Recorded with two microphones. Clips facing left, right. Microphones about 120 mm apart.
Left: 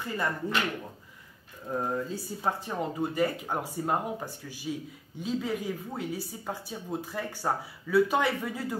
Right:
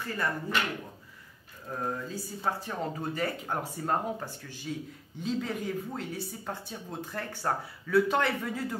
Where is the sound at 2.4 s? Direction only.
10° left (ahead or behind).